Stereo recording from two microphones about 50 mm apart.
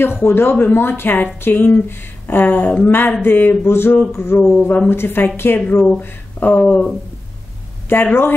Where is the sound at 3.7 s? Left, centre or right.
Left.